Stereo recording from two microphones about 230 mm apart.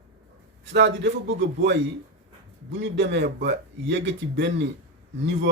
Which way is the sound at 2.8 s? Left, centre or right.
Right.